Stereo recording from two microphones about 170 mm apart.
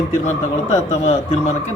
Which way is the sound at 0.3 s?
40° left (ahead or behind).